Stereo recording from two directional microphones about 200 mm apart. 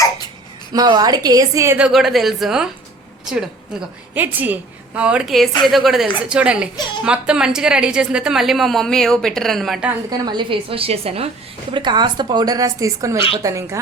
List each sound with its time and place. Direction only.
0.7 s a woman's voice: 20° right (ahead or behind)
1.9 s a woman's voice: centre (ahead or behind)
10.1 s a woman's voice: 20° right (ahead or behind)